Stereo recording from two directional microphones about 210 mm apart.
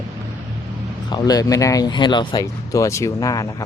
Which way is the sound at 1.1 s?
20° left (ahead or behind).